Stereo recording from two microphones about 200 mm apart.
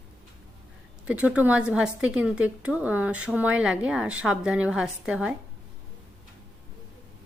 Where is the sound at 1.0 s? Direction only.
5° right (ahead or behind).